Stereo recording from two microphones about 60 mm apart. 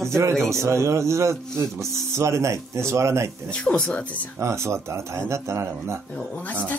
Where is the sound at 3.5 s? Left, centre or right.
Centre.